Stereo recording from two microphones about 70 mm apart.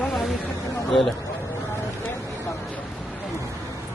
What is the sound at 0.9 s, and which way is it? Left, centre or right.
Speech, centre.